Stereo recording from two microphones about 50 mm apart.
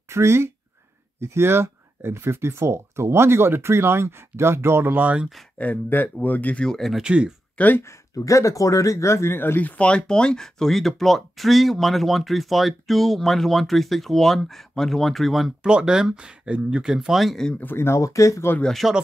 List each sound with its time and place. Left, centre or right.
0.1 s speech: right
5.6 s speech: left
6.6 s speech: centre
7.0 s speech: centre
7.5 s speech: left
7.8 s speech: left
9.3 s speech: left
9.6 s speech: left; by 15.5 s centre
15.6 s speech: centre
16.8 s speech: centre
17.7 s speech: left
18.8 s speech: centre